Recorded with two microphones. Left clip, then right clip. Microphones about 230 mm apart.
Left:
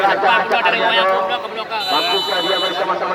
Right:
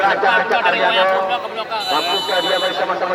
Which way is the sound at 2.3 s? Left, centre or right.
Right.